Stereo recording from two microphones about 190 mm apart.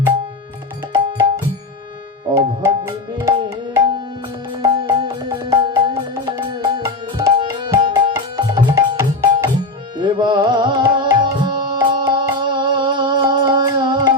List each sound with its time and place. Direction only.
2.3 s tabla: 15° right (ahead or behind)
4.6 s music: 20° right (ahead or behind)
7.9 s tabla: 20° right (ahead or behind)